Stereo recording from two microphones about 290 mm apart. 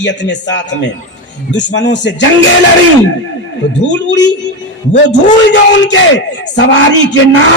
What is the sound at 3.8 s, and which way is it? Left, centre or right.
Speech, left.